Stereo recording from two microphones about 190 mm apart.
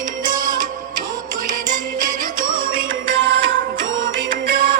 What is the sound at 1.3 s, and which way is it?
Music, 45° right (ahead or behind).